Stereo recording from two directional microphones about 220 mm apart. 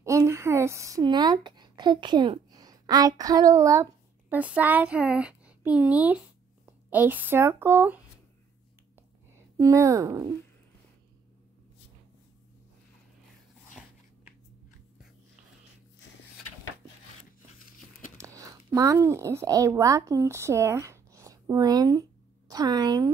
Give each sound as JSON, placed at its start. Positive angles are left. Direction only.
{"t": 0.0, "sound": "speech", "side_deg": -15}
{"t": 9.3, "sound": "speech", "side_deg": -15}
{"t": 13.8, "sound": "biting", "side_deg": -5}
{"t": 18.1, "sound": "a woman's voice", "side_deg": -15}